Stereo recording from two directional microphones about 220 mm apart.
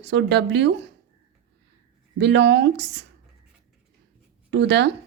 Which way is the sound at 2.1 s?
50° right (ahead or behind).